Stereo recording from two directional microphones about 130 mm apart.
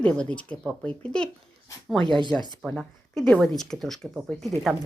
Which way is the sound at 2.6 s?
Centre (ahead or behind).